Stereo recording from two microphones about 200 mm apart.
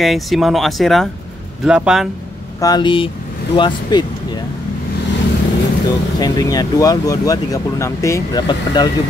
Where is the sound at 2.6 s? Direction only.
20° left (ahead or behind).